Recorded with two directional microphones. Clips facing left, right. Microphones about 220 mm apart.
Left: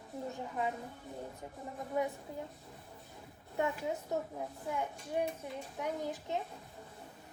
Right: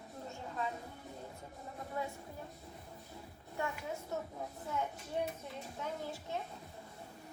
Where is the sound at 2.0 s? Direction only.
20° left (ahead or behind).